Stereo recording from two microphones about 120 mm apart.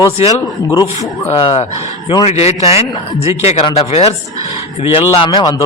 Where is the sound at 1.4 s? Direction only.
45° left (ahead or behind).